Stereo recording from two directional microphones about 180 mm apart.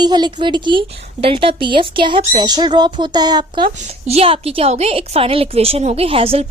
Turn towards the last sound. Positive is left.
turn(degrees=-30)  # may be behind; listen again after turning